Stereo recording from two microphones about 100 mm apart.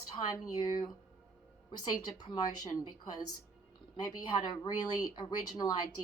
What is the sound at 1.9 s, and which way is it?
A woman's voice, 40° left (ahead or behind).